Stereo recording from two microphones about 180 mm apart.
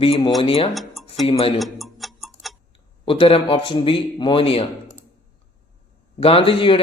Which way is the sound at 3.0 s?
30° left (ahead or behind).